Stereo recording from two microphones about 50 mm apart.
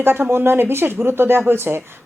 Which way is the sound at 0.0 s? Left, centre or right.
Right.